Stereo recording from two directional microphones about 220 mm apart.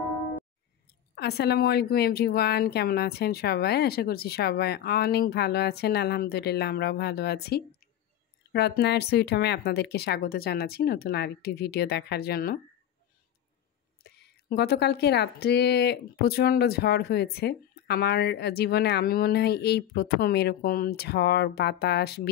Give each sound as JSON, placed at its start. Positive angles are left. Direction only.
{"t": 1.1, "sound": "speech", "side_deg": 50}
{"t": 14.0, "sound": "speech", "side_deg": 45}